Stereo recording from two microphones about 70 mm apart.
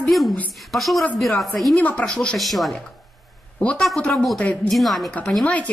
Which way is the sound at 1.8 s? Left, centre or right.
Centre.